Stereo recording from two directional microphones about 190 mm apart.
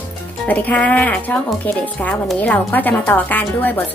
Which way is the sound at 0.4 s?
10° left (ahead or behind).